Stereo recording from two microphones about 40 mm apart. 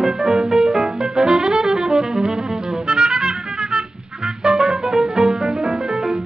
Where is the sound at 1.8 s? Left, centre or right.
Centre.